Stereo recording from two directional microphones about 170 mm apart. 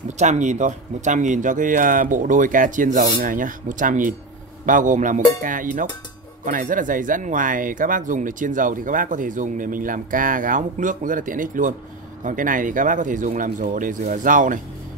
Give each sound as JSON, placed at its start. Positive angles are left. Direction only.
{"t": 0.2, "sound": "speech", "side_deg": -45}